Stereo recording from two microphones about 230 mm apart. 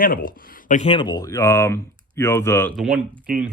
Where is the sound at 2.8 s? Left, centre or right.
Centre.